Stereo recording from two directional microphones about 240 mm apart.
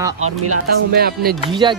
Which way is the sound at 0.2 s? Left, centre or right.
Right.